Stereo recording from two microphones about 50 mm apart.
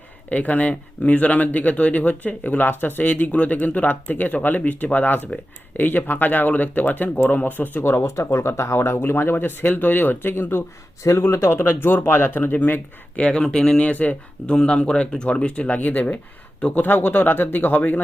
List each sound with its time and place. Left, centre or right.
0.3 s speech: left
7.9 s speech: left
9.0 s speech: left
13.1 s speech: left
14.5 s speech: centre; by 18.0 s left